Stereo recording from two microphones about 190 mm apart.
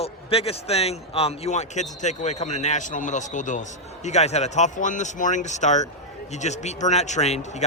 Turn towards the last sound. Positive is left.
turn(degrees=35)  # may be behind; listen again after turning